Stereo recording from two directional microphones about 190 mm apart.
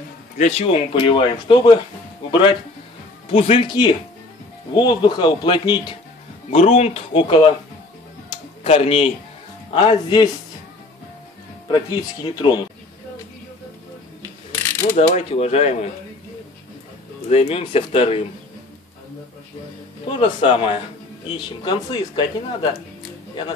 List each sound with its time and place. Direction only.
0.4 s speech: 35° left (ahead or behind)
3.3 s speech: 30° left (ahead or behind)
8.6 s speech: 30° left (ahead or behind)
11.7 s speech: 20° left (ahead or behind)
15.0 s speech: 35° left (ahead or behind)
17.3 s speech: 35° left (ahead or behind)
20.1 s speech: 30° left (ahead or behind)